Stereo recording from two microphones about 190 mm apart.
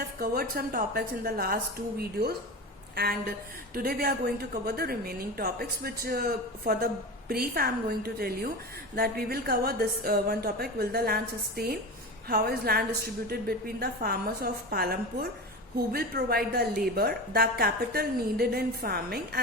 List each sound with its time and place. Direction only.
0.2 s a woman's voice: 50° right (ahead or behind)
2.9 s a woman's voice: 55° right (ahead or behind)